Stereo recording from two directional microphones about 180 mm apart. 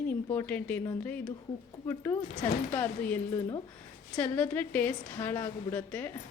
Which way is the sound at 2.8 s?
10° left (ahead or behind).